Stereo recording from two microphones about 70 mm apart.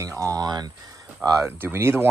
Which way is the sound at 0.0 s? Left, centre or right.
Right.